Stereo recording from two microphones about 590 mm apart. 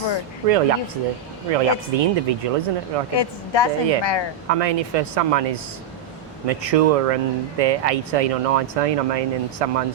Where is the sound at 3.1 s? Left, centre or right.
Left.